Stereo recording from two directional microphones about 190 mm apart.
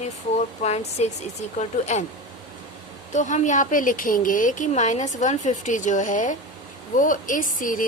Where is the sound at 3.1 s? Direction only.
40° left (ahead or behind).